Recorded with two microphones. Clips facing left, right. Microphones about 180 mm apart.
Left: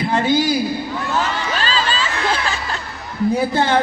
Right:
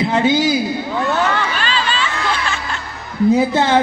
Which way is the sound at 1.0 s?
65° right (ahead or behind).